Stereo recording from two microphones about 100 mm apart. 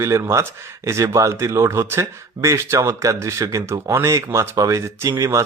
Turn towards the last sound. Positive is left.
turn(degrees=-30)  # may be behind; listen again after turning